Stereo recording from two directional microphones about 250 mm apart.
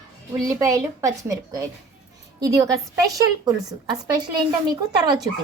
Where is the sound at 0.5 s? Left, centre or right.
Centre.